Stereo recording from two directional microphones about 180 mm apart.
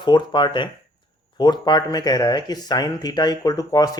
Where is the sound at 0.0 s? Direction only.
25° left (ahead or behind).